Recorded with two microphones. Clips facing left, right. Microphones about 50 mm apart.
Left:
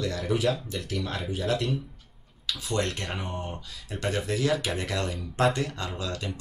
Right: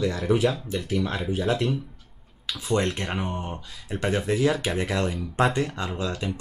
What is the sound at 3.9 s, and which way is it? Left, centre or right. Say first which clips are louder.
Speech: right 4 dB; centre.